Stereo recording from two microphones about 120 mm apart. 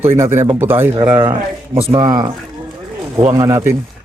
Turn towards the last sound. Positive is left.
turn(degrees=-25)  # may be behind; listen again after turning